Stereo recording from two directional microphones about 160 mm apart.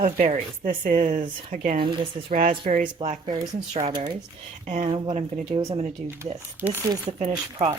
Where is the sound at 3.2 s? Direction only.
25° right (ahead or behind).